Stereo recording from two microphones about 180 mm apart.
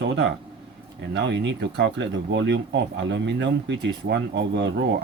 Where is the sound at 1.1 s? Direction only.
75° right (ahead or behind).